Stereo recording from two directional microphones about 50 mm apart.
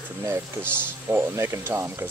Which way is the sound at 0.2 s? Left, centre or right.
Right.